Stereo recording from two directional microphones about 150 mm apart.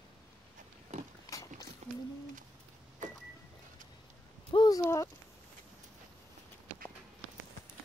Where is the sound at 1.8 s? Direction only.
45° right (ahead or behind).